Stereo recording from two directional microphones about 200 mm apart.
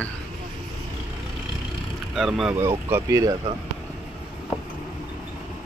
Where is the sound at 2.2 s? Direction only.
Centre (ahead or behind).